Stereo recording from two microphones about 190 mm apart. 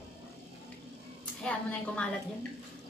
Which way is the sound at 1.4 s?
5° left (ahead or behind).